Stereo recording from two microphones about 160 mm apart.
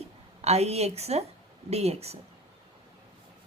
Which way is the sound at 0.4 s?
40° right (ahead or behind).